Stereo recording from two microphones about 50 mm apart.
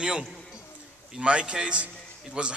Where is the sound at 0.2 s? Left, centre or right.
Centre.